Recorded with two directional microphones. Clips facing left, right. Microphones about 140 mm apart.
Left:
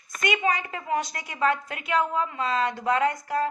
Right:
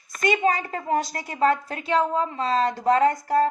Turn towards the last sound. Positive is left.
turn(degrees=-40)  # may be behind; listen again after turning